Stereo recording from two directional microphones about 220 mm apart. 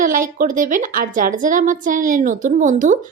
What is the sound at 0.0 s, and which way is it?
A woman's voice, 35° right (ahead or behind).